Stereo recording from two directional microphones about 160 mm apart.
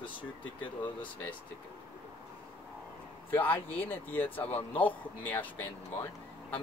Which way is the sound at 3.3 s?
10° left (ahead or behind).